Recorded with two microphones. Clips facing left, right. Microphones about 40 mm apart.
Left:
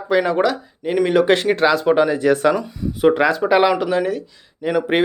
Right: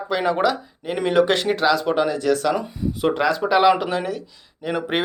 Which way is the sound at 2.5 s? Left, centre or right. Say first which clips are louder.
Left 1 dB; centre.